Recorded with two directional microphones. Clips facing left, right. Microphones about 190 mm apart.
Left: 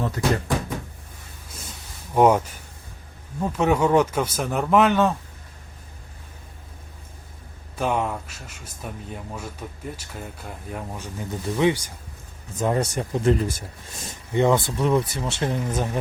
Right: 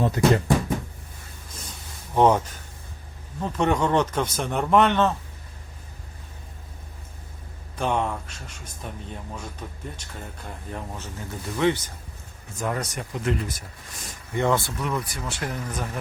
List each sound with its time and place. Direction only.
0.2 s speech: 20° right (ahead or behind)
2.1 s speech: 10° left (ahead or behind)
3.4 s speech: 5° left (ahead or behind)
7.8 s speech: 5° left (ahead or behind)
12.5 s speech: 25° left (ahead or behind)